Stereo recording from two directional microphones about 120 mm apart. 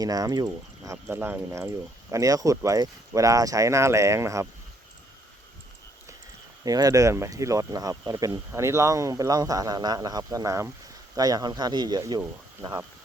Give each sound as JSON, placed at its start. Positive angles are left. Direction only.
{"t": 0.0, "sound": "speech", "side_deg": -30}
{"t": 6.7, "sound": "speech", "side_deg": -30}